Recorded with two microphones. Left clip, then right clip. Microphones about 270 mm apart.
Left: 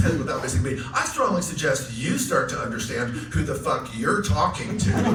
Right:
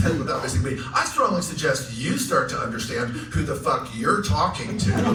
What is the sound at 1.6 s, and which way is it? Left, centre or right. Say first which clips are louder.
Speech: even; centre.